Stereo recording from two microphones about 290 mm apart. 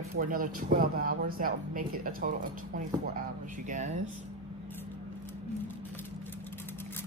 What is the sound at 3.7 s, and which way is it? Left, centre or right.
Speech, right.